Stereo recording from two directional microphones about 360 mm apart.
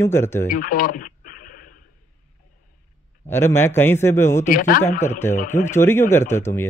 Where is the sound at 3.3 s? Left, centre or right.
Centre.